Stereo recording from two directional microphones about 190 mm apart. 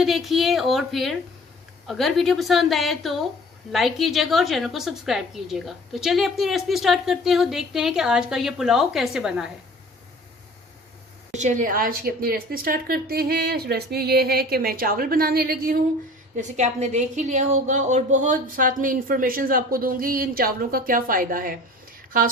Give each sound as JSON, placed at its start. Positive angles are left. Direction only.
{"t": 0.0, "sound": "a woman's voice", "side_deg": 0}
{"t": 11.3, "sound": "a woman's voice", "side_deg": -40}
{"t": 16.3, "sound": "a woman's voice", "side_deg": -40}